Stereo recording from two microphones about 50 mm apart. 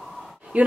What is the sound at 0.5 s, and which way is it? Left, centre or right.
Speech, right.